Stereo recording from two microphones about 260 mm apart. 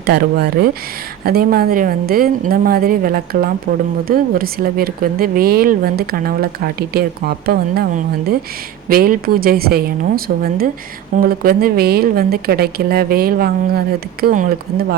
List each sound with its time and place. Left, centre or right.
0.0 s a woman's voice: right